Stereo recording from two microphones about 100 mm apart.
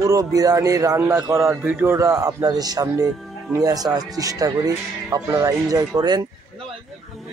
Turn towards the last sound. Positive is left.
turn(degrees=-40)  # may be behind; listen again after turning